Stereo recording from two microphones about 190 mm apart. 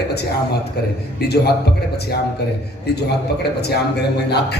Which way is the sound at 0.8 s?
60° left (ahead or behind).